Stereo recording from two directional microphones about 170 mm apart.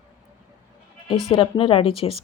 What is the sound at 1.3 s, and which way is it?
Speech, 30° left (ahead or behind).